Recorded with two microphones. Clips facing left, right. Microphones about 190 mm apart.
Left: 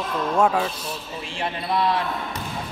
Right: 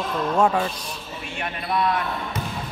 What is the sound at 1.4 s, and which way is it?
Speech, 30° left (ahead or behind).